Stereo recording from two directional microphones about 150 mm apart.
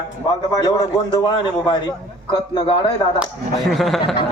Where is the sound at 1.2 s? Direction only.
30° left (ahead or behind).